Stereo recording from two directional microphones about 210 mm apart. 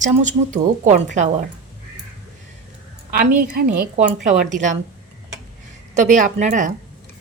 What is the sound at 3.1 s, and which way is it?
A woman's voice, 45° right (ahead or behind).